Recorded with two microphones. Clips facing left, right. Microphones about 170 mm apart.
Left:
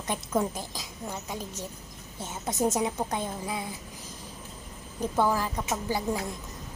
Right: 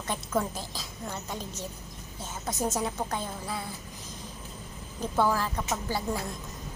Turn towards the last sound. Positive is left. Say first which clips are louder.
# left 2 dB
turn(degrees=15)  # may be behind; listen again after turning